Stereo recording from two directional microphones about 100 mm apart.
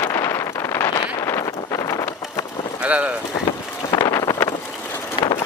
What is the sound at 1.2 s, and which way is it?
Wind noise, 30° left (ahead or behind).